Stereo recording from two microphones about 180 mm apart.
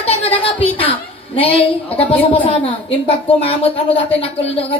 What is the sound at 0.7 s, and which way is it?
A woman's voice, 30° left (ahead or behind).